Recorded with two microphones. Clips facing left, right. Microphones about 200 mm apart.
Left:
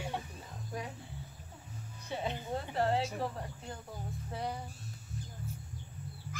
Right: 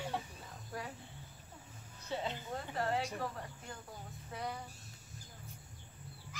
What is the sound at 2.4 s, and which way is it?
Insect, 30° left (ahead or behind).